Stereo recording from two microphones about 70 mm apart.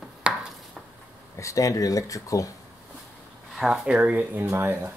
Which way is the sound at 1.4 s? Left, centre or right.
Left.